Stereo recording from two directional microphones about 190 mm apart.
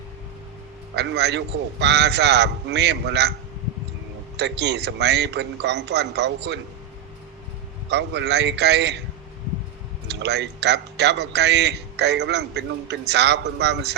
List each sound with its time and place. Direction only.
0.9 s a man's voice: 65° right (ahead or behind)
4.4 s a man's voice: 65° right (ahead or behind)
7.9 s a man's voice: 65° right (ahead or behind)
10.1 s a man's voice: 65° right (ahead or behind)